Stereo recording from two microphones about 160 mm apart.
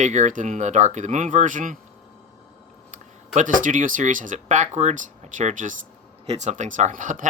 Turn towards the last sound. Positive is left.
turn(degrees=-50)  # may be behind; listen again after turning